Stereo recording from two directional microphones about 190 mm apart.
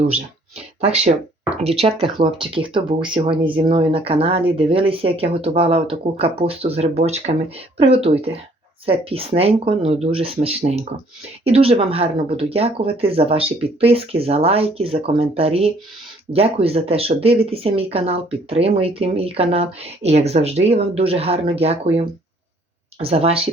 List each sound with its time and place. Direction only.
0.8 s speech: 35° right (ahead or behind)